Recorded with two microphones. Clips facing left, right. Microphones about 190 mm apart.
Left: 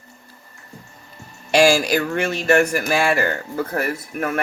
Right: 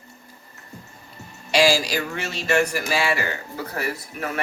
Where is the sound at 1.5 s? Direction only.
50° left (ahead or behind).